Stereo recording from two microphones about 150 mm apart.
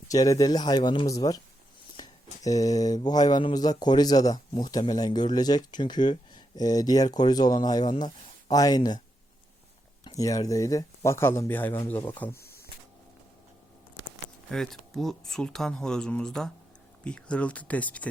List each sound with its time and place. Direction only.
0.1 s speech: 25° left (ahead or behind)
10.0 s speech: 25° left (ahead or behind)
12.4 s a sound: 90° left
14.5 s speech: centre (ahead or behind)